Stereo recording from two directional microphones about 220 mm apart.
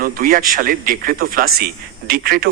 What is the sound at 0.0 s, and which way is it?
A man's voice, 40° right (ahead or behind).